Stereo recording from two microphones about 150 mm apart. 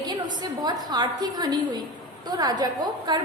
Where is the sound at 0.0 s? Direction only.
30° right (ahead or behind).